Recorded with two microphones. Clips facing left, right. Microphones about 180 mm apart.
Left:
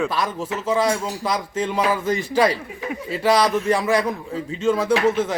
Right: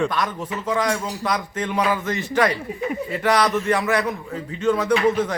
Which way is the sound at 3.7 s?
30° left (ahead or behind).